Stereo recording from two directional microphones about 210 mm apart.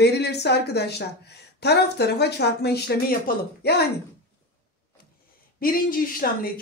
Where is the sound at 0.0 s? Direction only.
50° left (ahead or behind).